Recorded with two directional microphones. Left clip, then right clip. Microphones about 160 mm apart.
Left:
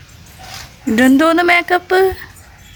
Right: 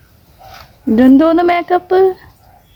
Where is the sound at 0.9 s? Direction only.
15° right (ahead or behind).